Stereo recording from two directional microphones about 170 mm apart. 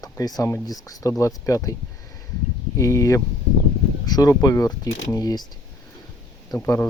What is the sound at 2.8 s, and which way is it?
Speech, 20° left (ahead or behind).